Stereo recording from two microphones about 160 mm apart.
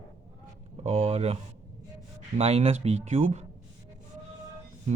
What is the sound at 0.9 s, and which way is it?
Speech, 40° right (ahead or behind).